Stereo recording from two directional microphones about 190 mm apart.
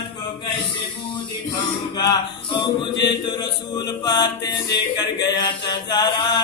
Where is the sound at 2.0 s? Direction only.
20° left (ahead or behind).